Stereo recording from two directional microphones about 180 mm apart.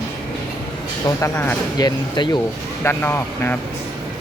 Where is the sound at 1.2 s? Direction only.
15° left (ahead or behind).